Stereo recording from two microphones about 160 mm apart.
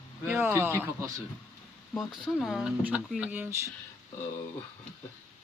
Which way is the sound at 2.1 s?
Centre (ahead or behind).